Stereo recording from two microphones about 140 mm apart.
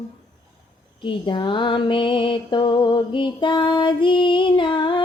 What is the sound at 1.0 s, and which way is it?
Music, 35° left (ahead or behind).